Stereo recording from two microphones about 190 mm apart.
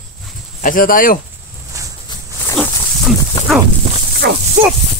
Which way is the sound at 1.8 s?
15° right (ahead or behind).